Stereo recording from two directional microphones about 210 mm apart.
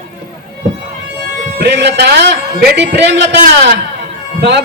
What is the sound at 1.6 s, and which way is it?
A man's voice, 55° right (ahead or behind).